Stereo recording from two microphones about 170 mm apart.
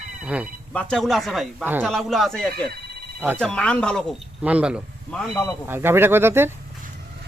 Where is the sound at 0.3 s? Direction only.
10° right (ahead or behind).